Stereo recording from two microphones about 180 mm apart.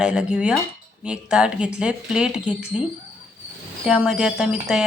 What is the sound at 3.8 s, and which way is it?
Speech, 5° right (ahead or behind).